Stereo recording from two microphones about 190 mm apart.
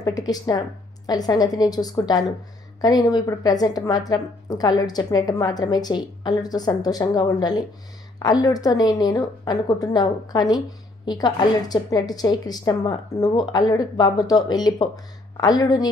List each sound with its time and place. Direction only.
0.0 s a woman's voice: 20° left (ahead or behind)